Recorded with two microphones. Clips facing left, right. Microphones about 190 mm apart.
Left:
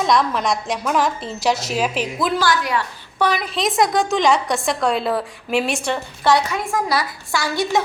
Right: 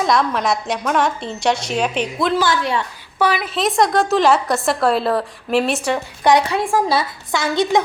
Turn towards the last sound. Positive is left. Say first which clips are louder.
# right 3 dB
turn(degrees=-20)  # may be behind; listen again after turning